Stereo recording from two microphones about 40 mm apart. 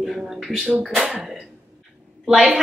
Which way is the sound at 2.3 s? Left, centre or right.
Centre.